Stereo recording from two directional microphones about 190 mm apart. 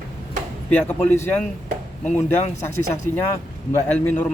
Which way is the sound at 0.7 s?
10° left (ahead or behind).